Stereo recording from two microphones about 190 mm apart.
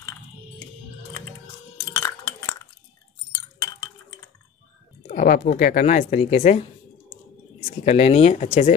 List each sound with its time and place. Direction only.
2.0 s chink: 15° left (ahead or behind)
5.0 s speech: 45° left (ahead or behind)
7.8 s speech: 35° left (ahead or behind)